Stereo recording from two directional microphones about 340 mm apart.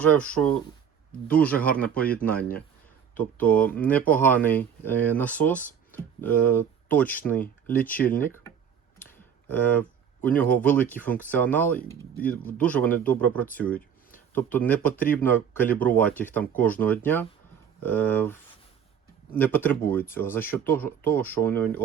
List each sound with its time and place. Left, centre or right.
0.0 s speech: centre
1.5 s speech: left
1.8 s speech: centre
3.2 s speech: centre
9.0 s computer keyboard: centre
10.2 s speech: centre
14.8 s speech: centre